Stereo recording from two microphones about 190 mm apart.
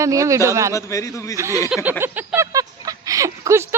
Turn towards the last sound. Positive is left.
turn(degrees=-15)  # may be behind; listen again after turning